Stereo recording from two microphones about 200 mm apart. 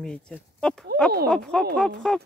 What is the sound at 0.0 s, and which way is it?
Speech, 5° left (ahead or behind).